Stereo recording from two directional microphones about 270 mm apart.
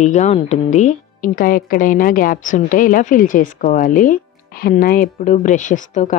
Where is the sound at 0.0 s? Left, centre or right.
Left.